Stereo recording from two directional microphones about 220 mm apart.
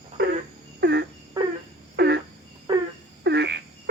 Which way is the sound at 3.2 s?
50° right (ahead or behind).